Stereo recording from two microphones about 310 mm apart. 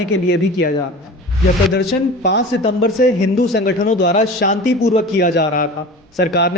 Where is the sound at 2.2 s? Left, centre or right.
Left.